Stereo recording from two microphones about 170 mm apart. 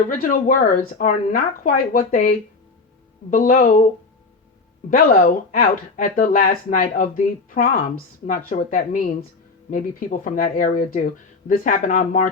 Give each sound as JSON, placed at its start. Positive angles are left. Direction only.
{"t": 0.2, "sound": "speech", "side_deg": 50}
{"t": 3.2, "sound": "speech", "side_deg": 50}
{"t": 4.9, "sound": "speech", "side_deg": 55}